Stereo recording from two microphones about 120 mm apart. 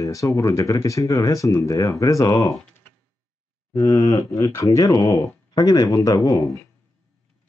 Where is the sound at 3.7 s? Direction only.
25° left (ahead or behind).